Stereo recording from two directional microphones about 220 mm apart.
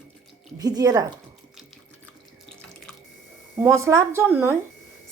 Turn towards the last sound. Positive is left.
turn(degrees=-10)  # may be behind; listen again after turning